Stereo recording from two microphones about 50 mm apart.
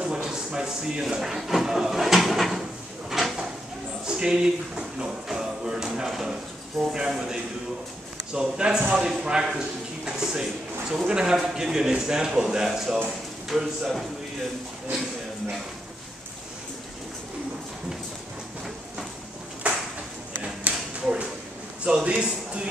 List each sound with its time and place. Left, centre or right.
0.0 s speech: centre
3.1 s drawer open or close: centre
4.0 s a man's voice: centre
19.6 s a sound: right
21.8 s a man's voice: right